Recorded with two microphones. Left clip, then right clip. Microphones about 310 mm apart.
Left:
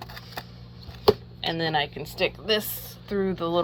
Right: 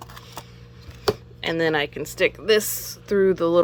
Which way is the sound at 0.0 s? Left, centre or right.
Centre.